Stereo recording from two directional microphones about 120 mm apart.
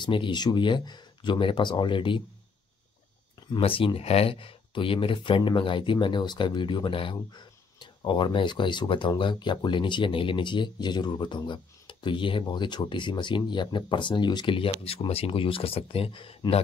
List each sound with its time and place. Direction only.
0.0 s speech: 40° left (ahead or behind)
3.3 s speech: 45° left (ahead or behind)